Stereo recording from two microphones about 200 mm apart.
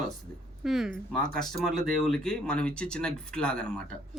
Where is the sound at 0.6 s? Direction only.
Centre (ahead or behind).